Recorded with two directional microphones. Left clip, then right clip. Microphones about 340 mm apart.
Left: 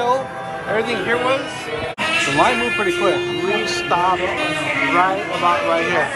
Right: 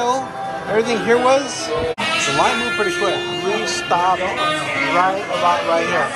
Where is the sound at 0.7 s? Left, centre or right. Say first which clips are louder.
Right 3 dB; centre.